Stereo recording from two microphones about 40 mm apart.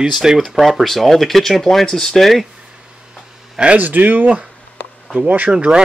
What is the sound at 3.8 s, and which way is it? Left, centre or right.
Speech, right.